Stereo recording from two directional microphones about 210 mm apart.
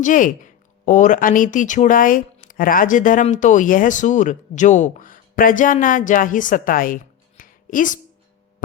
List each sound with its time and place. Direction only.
0.0 s speech: 40° left (ahead or behind)